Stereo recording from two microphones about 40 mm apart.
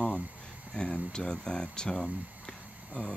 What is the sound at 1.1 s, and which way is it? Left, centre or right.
Speech, centre.